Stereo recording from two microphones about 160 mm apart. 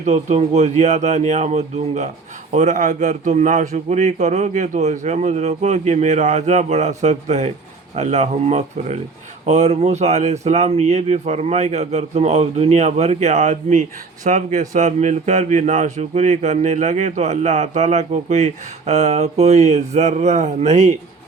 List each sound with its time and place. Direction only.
0.0 s speech: 45° right (ahead or behind)